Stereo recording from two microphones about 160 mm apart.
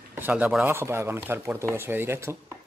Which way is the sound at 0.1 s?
10° right (ahead or behind).